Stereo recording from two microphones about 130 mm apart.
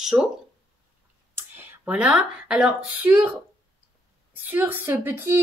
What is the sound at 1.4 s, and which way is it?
Speech, 15° right (ahead or behind).